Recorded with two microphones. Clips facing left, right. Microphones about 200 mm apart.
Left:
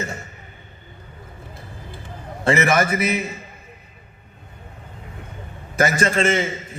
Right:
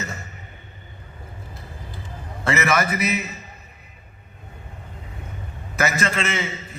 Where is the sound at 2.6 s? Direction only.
50° left (ahead or behind).